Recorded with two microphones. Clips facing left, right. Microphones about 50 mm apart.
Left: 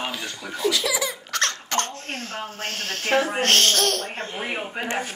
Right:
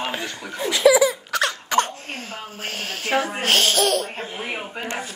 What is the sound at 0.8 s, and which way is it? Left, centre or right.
Speech, centre.